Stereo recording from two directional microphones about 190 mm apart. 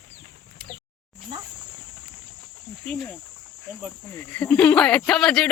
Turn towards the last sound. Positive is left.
turn(degrees=5)  # may be behind; listen again after turning